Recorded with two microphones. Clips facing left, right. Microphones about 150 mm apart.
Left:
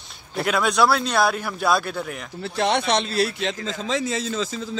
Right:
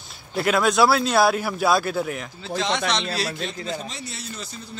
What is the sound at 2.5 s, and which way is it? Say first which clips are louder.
Speech: left 4 dB; 60° left (ahead or behind).